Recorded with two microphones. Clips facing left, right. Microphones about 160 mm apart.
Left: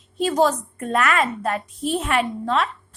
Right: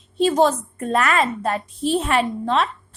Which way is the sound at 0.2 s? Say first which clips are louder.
Right 2 dB; 25° right (ahead or behind).